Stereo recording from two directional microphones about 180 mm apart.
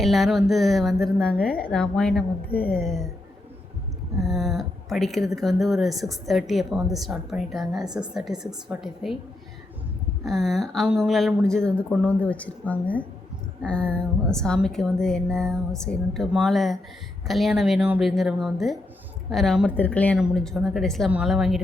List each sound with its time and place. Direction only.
0.0 s a woman's voice: centre (ahead or behind)
4.2 s a woman's voice: centre (ahead or behind)
10.2 s a woman's voice: centre (ahead or behind)